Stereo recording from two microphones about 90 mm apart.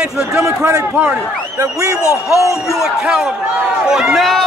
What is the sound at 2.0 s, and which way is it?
Speech, 35° left (ahead or behind).